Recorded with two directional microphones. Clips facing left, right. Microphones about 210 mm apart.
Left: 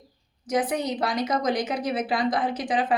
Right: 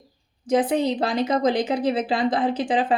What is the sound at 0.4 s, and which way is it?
Speech, 30° right (ahead or behind).